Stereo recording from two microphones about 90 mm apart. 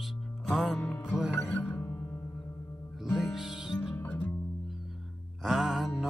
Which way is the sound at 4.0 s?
15° left (ahead or behind).